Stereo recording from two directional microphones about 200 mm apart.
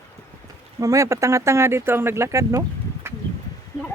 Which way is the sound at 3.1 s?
10° right (ahead or behind).